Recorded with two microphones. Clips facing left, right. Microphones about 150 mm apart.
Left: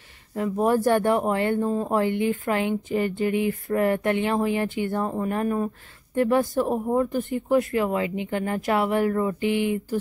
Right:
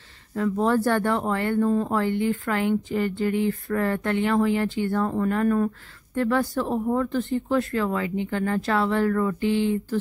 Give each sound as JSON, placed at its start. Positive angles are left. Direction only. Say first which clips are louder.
{"t": 0.3, "sound": "speech", "louder": "even", "side_deg": 15}